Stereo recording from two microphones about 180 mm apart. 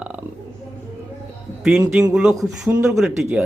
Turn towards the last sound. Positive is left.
turn(degrees=-5)  # may be behind; listen again after turning